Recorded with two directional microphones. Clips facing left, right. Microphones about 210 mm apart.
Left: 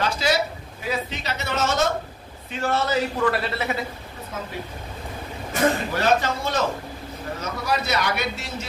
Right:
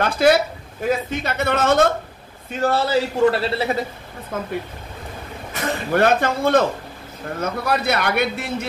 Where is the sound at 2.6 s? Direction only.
35° right (ahead or behind).